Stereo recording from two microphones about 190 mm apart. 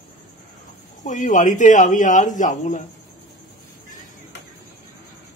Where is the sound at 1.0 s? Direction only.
40° left (ahead or behind).